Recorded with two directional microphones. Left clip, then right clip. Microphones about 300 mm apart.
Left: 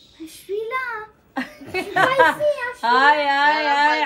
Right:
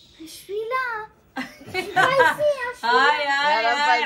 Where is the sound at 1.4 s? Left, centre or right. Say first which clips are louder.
Left 2 dB; left.